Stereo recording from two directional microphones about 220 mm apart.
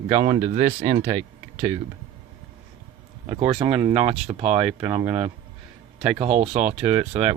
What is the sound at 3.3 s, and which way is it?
Speech, 25° right (ahead or behind).